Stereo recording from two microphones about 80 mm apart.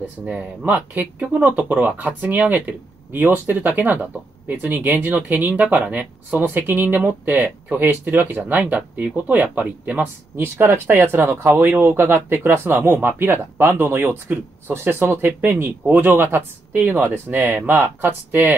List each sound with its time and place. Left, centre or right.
0.2 s speech: centre